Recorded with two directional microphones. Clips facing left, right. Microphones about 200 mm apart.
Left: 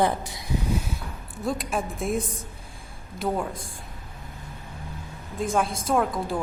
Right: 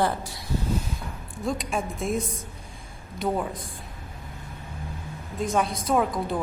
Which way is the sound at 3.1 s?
Centre (ahead or behind).